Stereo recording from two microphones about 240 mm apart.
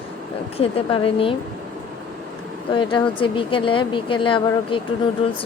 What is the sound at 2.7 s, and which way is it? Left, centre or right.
Speech, centre.